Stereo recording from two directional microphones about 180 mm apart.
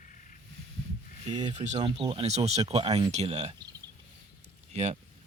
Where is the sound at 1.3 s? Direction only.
40° right (ahead or behind).